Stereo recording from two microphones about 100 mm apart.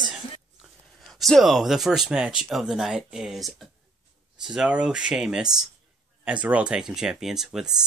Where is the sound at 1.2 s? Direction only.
Centre (ahead or behind).